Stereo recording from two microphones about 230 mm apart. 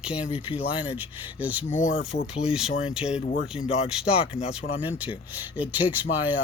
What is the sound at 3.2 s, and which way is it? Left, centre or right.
Speech, left.